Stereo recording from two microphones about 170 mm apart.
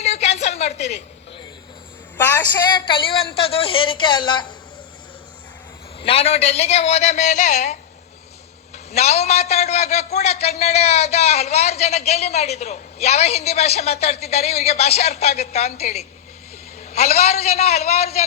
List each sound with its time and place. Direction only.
0.0 s a sound: 40° left (ahead or behind)
2.6 s a woman's voice: 30° left (ahead or behind)
6.0 s a man's voice: 35° left (ahead or behind)